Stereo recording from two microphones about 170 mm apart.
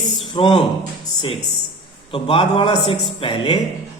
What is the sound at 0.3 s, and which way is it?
Speech, 25° left (ahead or behind).